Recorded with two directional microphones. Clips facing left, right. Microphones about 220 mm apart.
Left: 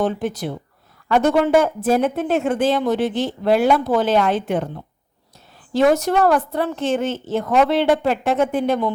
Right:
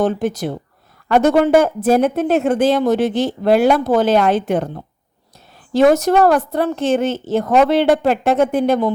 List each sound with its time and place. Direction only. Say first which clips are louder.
0.0 s a woman's voice: right 4 dB; 45° right (ahead or behind)
5.8 s a woman's voice: right 4 dB; 45° right (ahead or behind)